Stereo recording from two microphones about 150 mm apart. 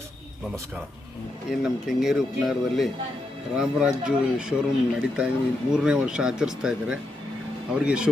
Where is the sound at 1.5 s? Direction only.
5° right (ahead or behind).